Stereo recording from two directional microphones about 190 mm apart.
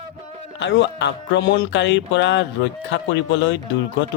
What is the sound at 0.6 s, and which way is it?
Speech, 70° left (ahead or behind).